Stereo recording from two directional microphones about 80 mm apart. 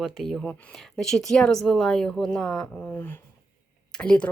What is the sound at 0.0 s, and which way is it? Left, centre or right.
Speech, centre.